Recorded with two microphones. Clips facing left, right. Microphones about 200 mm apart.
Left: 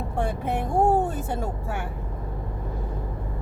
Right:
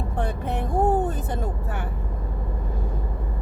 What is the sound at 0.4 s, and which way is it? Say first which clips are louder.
Speech: left 1 dB; 10° left (ahead or behind).